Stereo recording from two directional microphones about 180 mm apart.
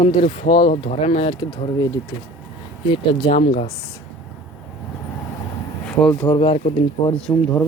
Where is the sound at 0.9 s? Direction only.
35° left (ahead or behind).